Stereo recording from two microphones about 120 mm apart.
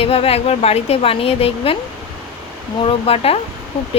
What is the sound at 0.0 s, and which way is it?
A woman's voice, 55° left (ahead or behind).